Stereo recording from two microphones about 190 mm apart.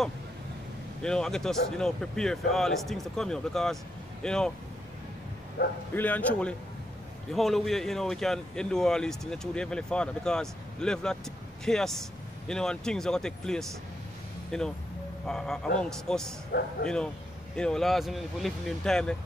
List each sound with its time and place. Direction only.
1.0 s speech: 5° left (ahead or behind)
5.6 s speech: 60° left (ahead or behind)
5.9 s a man's voice: 10° left (ahead or behind)